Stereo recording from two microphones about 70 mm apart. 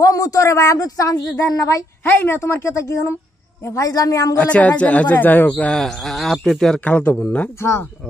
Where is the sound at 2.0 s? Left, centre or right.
Left.